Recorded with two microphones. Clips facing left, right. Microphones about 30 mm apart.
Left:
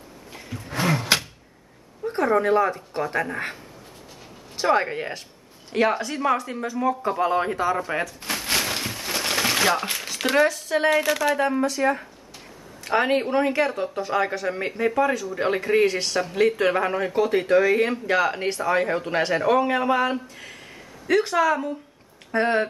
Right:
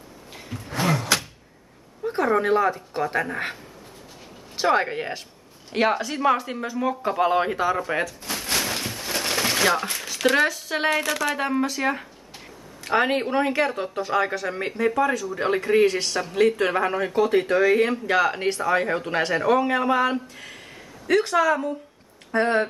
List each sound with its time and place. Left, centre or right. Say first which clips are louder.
0.9 s a sound: left 1 dB; left
2.0 s a sound: even; centre
2.9 s speech: right 1 dB; centre
4.6 s speech: even; centre
6.3 s speech: even; centre
7.6 s speech: even; centre
8.5 s a sound: left 1 dB; centre
10.3 s speech: left 3 dB; centre
10.9 s speech: left 2 dB; centre
11.3 s speech: left 2 dB; centre